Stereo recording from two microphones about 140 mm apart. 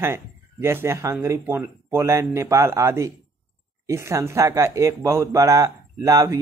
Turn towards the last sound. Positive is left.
turn(degrees=-20)  # may be behind; listen again after turning